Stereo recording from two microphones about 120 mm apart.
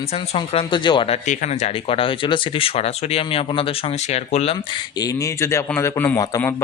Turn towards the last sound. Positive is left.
turn(degrees=15)  # may be behind; listen again after turning